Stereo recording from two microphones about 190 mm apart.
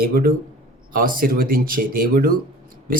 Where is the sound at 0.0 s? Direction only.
50° right (ahead or behind).